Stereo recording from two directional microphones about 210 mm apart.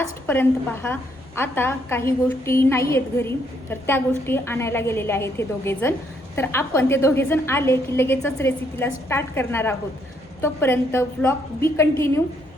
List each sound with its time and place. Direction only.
0.3 s a woman's voice: 10° left (ahead or behind)